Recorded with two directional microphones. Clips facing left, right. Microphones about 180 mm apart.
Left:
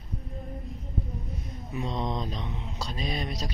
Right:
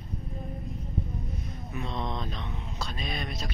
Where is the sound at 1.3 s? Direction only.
15° left (ahead or behind).